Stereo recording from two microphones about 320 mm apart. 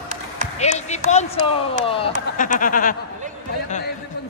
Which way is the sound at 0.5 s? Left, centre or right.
Left.